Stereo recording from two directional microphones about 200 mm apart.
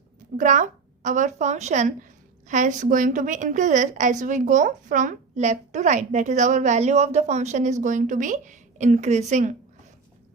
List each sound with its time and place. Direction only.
0.3 s a woman's voice: 40° right (ahead or behind)